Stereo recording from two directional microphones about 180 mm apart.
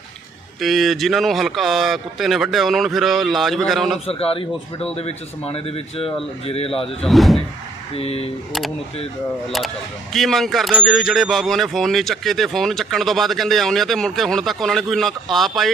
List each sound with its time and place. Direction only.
0.6 s speech: centre (ahead or behind)
4.0 s speech: 35° left (ahead or behind)
7.0 s speech: centre (ahead or behind)
7.9 s speech: 35° left (ahead or behind)
9.5 s speech: centre (ahead or behind)